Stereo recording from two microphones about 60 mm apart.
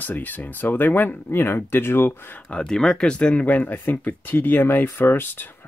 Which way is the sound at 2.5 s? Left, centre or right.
Centre.